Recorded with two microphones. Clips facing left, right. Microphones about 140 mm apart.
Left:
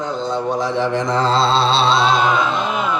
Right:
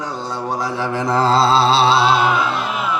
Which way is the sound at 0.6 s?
10° right (ahead or behind).